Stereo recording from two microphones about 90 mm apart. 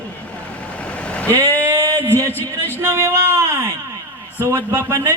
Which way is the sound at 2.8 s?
30° right (ahead or behind).